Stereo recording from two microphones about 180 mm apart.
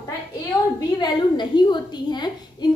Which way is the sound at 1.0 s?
25° left (ahead or behind).